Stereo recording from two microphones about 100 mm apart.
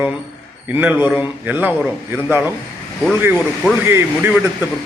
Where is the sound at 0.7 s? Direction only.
20° right (ahead or behind).